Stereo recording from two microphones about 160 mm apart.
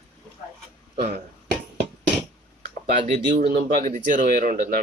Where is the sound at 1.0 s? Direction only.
70° right (ahead or behind).